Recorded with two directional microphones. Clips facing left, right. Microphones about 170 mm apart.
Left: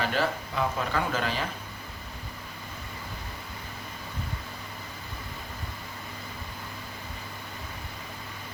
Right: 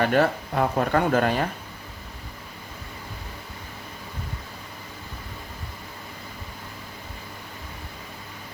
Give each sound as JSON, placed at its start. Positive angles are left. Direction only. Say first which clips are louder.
{"t": 0.0, "sound": "speech", "louder": "right 7 dB", "side_deg": -55}